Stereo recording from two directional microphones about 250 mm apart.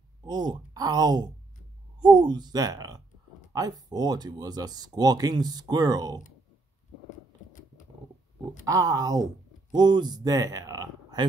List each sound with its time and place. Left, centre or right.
0.2 s speech: centre
8.6 s speech: centre